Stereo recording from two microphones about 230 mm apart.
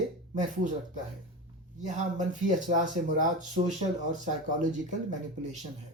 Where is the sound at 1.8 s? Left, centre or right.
Right.